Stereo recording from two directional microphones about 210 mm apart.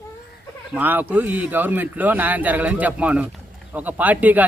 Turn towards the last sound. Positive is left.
turn(degrees=-5)  # may be behind; listen again after turning